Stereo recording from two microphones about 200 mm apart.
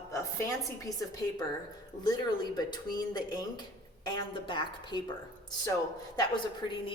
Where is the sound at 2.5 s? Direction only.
20° left (ahead or behind).